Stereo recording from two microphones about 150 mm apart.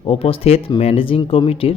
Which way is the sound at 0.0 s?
40° left (ahead or behind).